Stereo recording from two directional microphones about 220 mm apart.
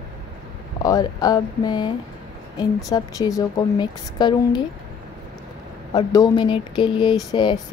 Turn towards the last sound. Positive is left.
turn(degrees=20)  # may be behind; listen again after turning